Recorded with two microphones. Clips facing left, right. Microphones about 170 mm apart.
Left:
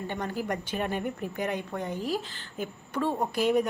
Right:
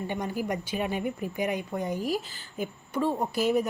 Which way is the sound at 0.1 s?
10° right (ahead or behind).